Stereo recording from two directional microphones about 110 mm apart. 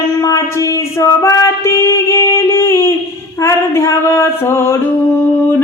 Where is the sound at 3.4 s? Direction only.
25° left (ahead or behind).